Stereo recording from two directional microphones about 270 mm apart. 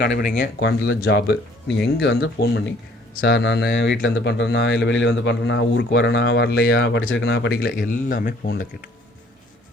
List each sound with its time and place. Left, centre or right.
0.0 s speech: left